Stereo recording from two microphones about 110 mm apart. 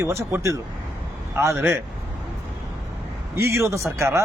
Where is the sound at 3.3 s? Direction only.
25° right (ahead or behind).